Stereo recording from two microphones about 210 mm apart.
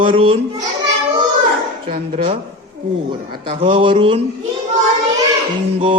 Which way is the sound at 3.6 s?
25° right (ahead or behind).